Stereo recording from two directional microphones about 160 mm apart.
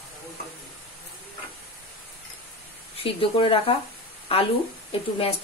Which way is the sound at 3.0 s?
35° left (ahead or behind).